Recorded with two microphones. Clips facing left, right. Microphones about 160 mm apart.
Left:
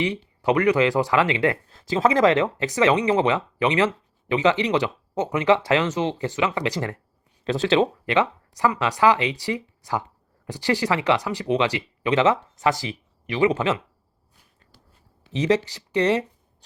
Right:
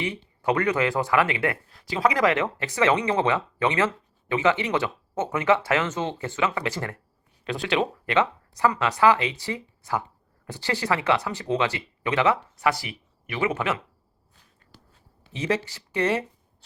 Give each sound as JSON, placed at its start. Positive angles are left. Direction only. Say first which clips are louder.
{"t": 0.0, "sound": "speech", "louder": "left 4 dB", "side_deg": 15}
{"t": 15.3, "sound": "speech", "louder": "left 5 dB", "side_deg": 20}